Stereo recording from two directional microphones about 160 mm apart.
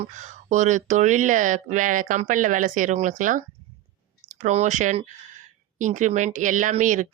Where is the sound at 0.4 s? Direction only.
50° right (ahead or behind).